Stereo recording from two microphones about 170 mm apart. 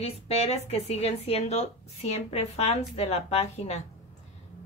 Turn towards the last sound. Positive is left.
turn(degrees=40)  # may be behind; listen again after turning